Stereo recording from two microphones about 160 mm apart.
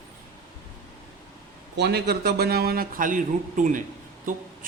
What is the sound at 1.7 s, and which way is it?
Speech, 90° right.